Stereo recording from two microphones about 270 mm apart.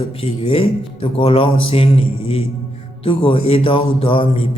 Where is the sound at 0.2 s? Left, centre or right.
Left.